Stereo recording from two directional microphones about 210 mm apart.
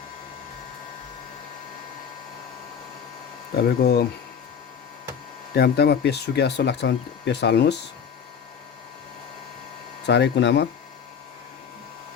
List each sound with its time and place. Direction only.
3.6 s speech: 50° left (ahead or behind)
5.5 s speech: 50° left (ahead or behind)
10.1 s speech: 55° left (ahead or behind)